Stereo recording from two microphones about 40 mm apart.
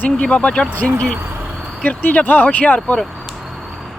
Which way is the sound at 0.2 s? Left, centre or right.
Left.